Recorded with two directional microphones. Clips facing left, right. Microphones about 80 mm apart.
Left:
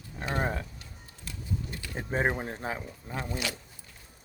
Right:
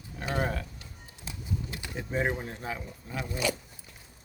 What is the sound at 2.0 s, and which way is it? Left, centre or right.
Speech, left.